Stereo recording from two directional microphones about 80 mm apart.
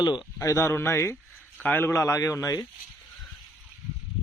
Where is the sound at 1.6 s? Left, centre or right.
Left.